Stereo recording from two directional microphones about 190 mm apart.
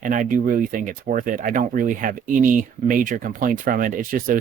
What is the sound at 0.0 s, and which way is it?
Speech, 45° right (ahead or behind).